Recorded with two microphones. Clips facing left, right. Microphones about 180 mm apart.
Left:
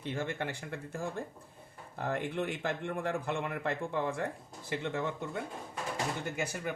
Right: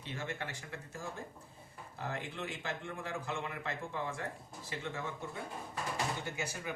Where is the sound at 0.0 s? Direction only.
55° left (ahead or behind).